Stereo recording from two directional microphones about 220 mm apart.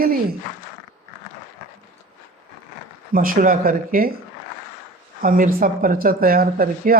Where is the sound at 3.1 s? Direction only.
40° right (ahead or behind).